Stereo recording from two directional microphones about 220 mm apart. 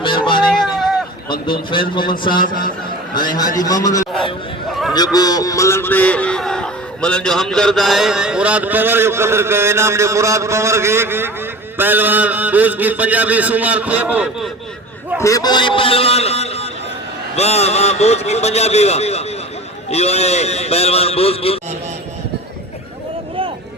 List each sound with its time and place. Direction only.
0.0 s music: 20° left (ahead or behind)
0.6 s a sound: centre (ahead or behind)
1.7 s a man's voice: 20° left (ahead or behind); by 14.5 s 5° right (ahead or behind)
15.2 s a man's voice: 15° left (ahead or behind)